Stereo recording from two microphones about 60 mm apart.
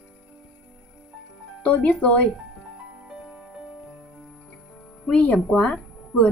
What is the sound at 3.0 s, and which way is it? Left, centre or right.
Music, centre.